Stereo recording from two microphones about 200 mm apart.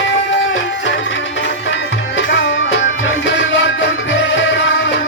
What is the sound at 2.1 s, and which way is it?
Music, 65° left (ahead or behind).